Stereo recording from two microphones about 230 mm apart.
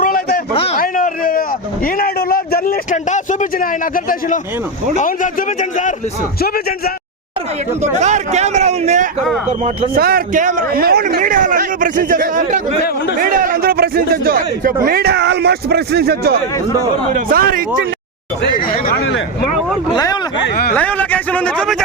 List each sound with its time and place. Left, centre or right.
0.0 s a sound: left
0.5 s a sound: left
0.8 s a sound: left
3.6 s a man's voice: left
7.8 s a man's voice: right
9.9 s speech: right
19.9 s a man's voice: centre
20.4 s speech: left
20.7 s a man's voice: centre